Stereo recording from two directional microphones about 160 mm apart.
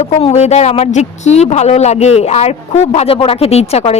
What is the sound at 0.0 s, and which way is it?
Speech, 40° left (ahead or behind).